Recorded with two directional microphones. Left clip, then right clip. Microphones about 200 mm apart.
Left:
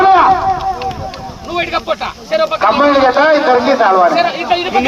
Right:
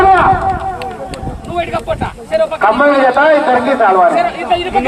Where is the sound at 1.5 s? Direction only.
35° left (ahead or behind).